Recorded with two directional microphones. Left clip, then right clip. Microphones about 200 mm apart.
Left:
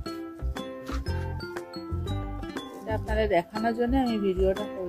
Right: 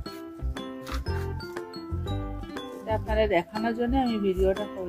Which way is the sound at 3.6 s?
30° left (ahead or behind).